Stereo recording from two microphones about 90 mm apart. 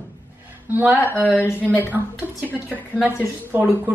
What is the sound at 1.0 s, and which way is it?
Speech, 20° left (ahead or behind).